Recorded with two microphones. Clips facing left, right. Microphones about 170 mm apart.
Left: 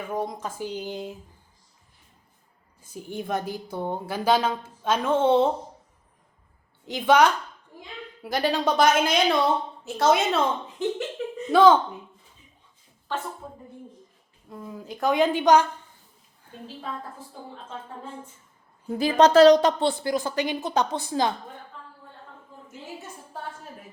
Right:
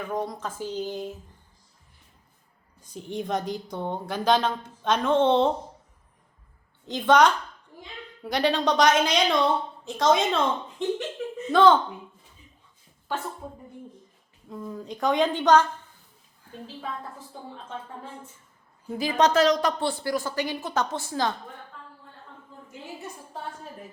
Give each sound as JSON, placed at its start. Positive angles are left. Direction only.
{"t": 0.1, "sound": "a woman's voice", "side_deg": 10}
{"t": 2.9, "sound": "a woman's voice", "side_deg": 5}
{"t": 6.8, "sound": "a woman's voice", "side_deg": 10}
{"t": 14.5, "sound": "a woman's voice", "side_deg": 5}
{"t": 18.9, "sound": "speech", "side_deg": 30}